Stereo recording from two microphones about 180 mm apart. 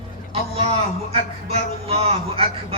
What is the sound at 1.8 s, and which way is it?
Speech, 35° right (ahead or behind).